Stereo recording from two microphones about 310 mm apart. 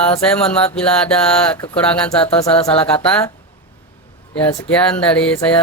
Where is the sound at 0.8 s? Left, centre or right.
Centre.